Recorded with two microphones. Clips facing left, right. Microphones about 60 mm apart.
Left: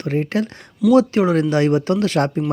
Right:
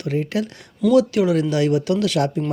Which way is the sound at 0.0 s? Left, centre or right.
Left.